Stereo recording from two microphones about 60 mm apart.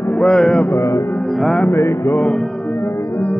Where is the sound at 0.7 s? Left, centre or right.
Left.